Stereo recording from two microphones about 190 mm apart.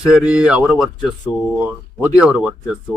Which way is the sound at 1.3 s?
25° left (ahead or behind).